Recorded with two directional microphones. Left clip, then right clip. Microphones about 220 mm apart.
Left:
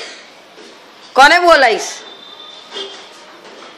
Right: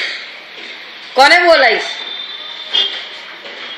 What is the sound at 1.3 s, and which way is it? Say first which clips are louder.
Speech: even; 75° left (ahead or behind).